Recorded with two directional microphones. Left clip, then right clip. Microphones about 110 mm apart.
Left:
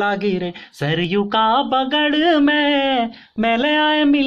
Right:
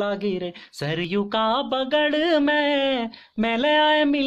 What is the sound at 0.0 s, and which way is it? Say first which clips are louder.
Speech: left 6 dB; 25° right (ahead or behind).